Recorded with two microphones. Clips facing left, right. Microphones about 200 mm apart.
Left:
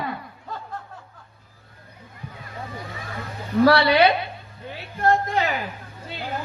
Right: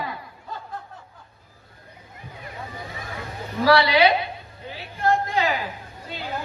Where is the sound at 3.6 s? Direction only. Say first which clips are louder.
Left 1 dB; 55° left (ahead or behind).